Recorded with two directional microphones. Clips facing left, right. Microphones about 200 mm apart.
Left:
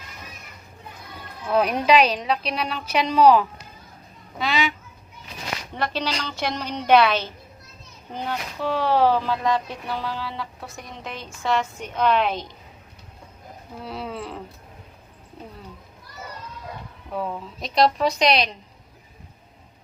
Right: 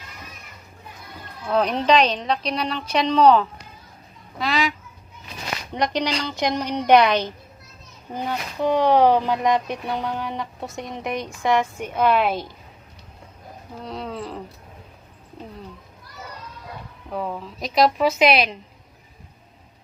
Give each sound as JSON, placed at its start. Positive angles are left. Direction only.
{"t": 1.5, "sound": "a woman's voice", "side_deg": 10}
{"t": 4.4, "sound": "goose", "side_deg": 0}
{"t": 5.7, "sound": "speech", "side_deg": -15}
{"t": 13.8, "sound": "a woman's voice", "side_deg": 5}
{"t": 17.1, "sound": "a woman's voice", "side_deg": 0}